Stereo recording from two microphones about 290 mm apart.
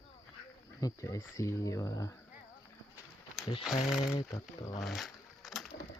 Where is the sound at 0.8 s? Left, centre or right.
Centre.